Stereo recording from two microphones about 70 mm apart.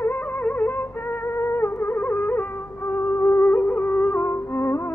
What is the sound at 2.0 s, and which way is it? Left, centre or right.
Music, left.